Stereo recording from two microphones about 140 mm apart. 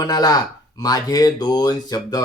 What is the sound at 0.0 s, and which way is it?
Speech, 30° left (ahead or behind).